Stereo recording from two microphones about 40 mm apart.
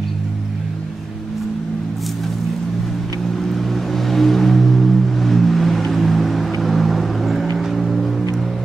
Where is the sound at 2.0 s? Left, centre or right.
Centre.